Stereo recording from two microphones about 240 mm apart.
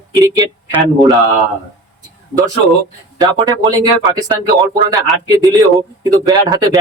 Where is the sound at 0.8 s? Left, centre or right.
Centre.